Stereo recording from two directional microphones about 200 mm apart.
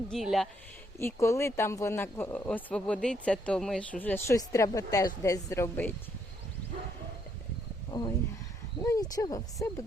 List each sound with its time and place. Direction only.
0.1 s speech: centre (ahead or behind)
0.9 s speech: 15° left (ahead or behind)
8.8 s speech: 15° left (ahead or behind)